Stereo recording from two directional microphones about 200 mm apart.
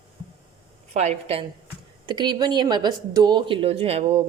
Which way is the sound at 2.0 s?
20° right (ahead or behind).